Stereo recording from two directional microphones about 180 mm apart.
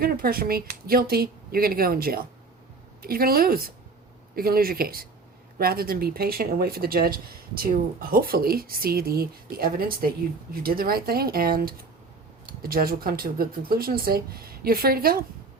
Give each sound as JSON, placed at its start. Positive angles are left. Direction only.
{"t": 0.0, "sound": "speech", "side_deg": -55}